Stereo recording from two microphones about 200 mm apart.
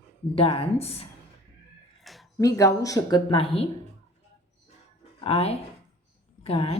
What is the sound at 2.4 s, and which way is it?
Speech, 15° left (ahead or behind).